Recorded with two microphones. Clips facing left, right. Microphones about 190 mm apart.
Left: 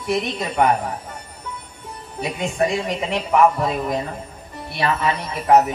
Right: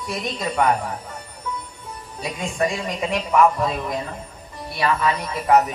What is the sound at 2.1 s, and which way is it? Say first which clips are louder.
A woman's voice: left 3 dB; 25° left (ahead or behind).